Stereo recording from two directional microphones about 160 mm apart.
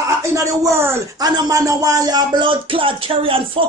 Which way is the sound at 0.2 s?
20° right (ahead or behind).